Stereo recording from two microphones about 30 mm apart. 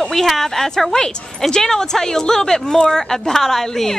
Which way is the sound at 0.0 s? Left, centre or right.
Centre.